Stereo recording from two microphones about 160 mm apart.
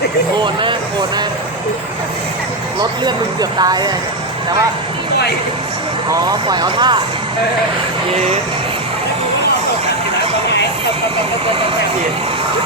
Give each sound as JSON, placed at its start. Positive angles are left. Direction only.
{"t": 0.3, "sound": "speech", "side_deg": -30}
{"t": 3.6, "sound": "speech", "side_deg": -25}
{"t": 6.1, "sound": "speech", "side_deg": -25}
{"t": 8.1, "sound": "speech", "side_deg": -40}